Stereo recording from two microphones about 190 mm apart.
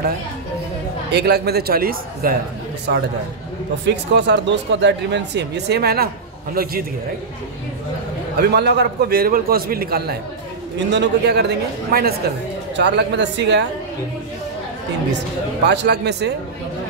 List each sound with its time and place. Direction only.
1.1 s speech: 60° right (ahead or behind)
3.8 s a man's voice: 65° right (ahead or behind)
8.4 s a man's voice: 60° right (ahead or behind)
15.6 s speech: 65° right (ahead or behind)